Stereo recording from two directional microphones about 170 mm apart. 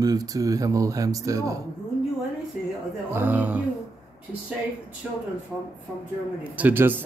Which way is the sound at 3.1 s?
10° right (ahead or behind).